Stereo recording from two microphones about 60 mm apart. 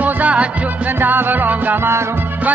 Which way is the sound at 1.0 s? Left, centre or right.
Right.